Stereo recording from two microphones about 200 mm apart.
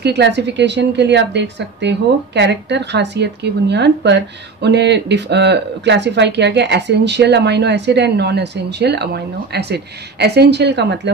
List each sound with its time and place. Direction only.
0.0 s speech: 55° right (ahead or behind)